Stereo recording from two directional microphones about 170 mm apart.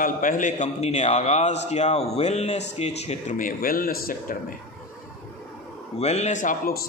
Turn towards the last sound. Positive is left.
turn(degrees=50)  # may be behind; listen again after turning